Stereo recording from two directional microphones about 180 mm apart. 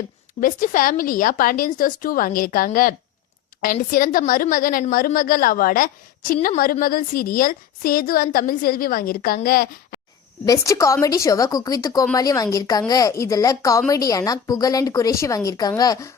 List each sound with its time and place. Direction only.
0.3 s a woman's voice: 50° left (ahead or behind)
10.4 s a woman's voice: 20° left (ahead or behind)